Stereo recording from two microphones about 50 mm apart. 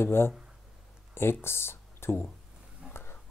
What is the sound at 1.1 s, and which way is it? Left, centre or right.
Speech, left.